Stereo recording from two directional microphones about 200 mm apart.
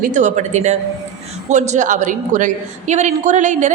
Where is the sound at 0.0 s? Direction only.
40° right (ahead or behind).